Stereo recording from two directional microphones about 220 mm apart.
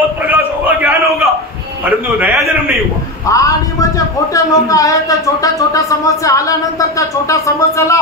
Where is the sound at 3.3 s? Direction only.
15° left (ahead or behind).